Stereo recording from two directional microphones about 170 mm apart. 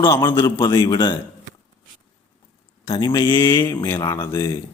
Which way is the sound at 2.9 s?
25° left (ahead or behind).